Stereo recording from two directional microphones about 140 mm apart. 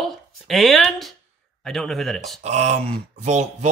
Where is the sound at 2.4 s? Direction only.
55° right (ahead or behind).